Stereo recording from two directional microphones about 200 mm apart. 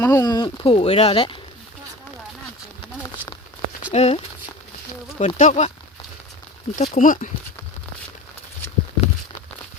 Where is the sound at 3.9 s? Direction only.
30° left (ahead or behind).